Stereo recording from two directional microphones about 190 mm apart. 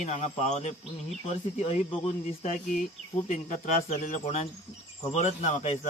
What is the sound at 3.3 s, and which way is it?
Speech, 40° left (ahead or behind).